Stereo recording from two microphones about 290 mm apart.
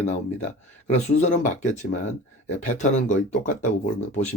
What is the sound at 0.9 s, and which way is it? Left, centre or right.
Speech, left.